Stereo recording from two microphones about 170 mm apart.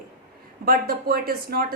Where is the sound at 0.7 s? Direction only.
60° right (ahead or behind).